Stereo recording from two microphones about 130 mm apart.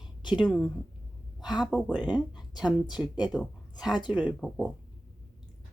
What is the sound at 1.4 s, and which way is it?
Speech, 35° left (ahead or behind).